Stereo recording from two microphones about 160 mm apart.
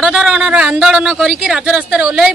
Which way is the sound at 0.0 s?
5° right (ahead or behind).